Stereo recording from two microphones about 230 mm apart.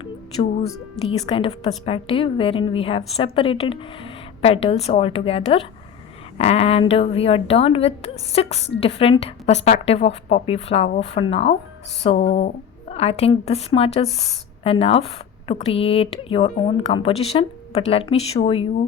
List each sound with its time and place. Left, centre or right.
0.0 s a woman's voice: left